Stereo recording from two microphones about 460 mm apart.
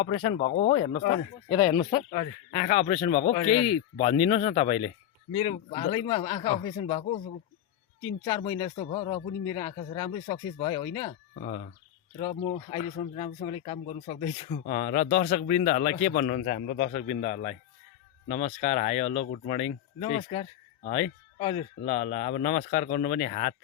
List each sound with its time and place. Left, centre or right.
0.0 s speech: centre
8.2 s speech: centre